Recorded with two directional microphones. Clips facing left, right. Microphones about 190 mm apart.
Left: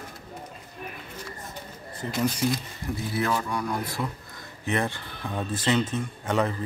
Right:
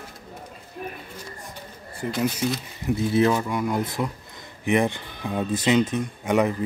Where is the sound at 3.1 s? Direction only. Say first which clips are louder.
Right 6 dB; 20° right (ahead or behind).